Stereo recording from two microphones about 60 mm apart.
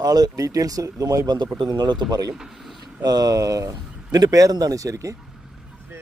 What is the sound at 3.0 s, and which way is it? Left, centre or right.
Speech, right.